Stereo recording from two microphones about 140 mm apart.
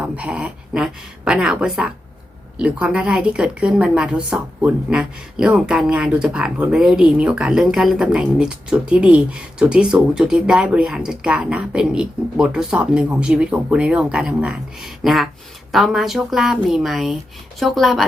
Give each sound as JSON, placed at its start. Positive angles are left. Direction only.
{"t": 0.0, "sound": "a woman's voice", "side_deg": -10}